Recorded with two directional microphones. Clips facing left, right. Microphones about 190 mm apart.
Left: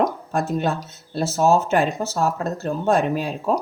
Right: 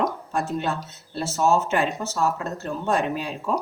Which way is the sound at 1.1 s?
40° left (ahead or behind).